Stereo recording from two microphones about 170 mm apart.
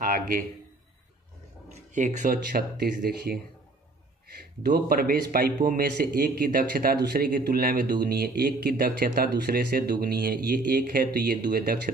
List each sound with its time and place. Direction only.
0.0 s a man's voice: 50° right (ahead or behind)
1.9 s speech: 45° right (ahead or behind); by 3.3 s 70° right (ahead or behind)
4.4 s speech: 65° right (ahead or behind)